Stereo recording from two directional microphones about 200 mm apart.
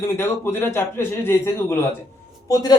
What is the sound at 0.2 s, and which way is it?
Speech, 10° left (ahead or behind).